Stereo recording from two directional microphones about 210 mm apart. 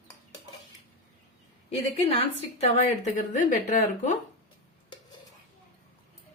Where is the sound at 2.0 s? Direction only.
25° left (ahead or behind).